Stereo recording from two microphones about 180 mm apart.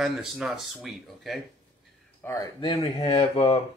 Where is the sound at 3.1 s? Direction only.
30° left (ahead or behind).